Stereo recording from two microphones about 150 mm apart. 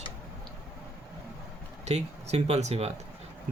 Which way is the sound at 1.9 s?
45° right (ahead or behind).